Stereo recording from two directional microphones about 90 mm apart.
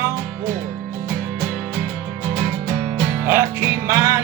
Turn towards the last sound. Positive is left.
turn(degrees=-35)  # may be behind; listen again after turning